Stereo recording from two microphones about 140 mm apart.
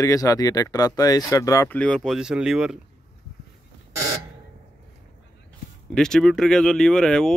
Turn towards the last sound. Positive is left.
turn(degrees=5)  # may be behind; listen again after turning